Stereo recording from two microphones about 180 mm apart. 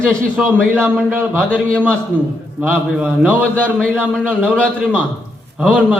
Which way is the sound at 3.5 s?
5° left (ahead or behind).